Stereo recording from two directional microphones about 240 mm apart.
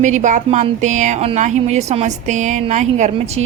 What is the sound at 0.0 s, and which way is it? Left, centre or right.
Speech, right.